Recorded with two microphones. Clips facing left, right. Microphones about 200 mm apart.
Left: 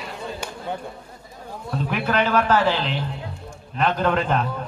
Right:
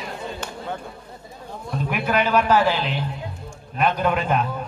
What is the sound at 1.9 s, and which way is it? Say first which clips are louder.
A man's voice: even; 10° right (ahead or behind).